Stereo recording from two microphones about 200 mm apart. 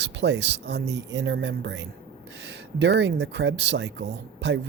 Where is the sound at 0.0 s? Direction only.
60° right (ahead or behind).